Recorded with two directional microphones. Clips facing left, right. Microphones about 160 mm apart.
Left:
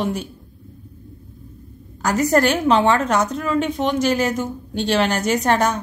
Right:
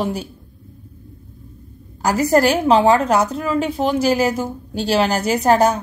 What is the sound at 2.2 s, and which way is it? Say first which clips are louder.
A woman's voice: right 2 dB; 30° right (ahead or behind).